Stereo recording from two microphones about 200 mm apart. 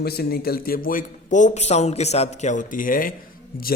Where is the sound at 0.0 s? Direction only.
50° left (ahead or behind).